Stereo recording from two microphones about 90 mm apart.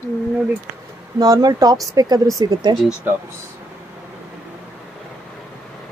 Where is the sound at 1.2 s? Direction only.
45° right (ahead or behind).